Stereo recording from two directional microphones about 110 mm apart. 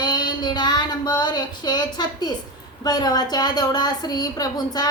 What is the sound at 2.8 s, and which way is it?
Speech, 40° left (ahead or behind).